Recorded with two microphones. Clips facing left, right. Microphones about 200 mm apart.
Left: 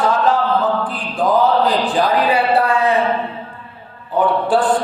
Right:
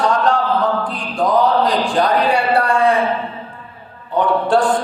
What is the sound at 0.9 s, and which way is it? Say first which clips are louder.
Speech: even; centre (ahead or behind).